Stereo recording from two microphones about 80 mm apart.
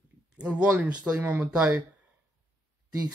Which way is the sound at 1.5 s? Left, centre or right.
Centre.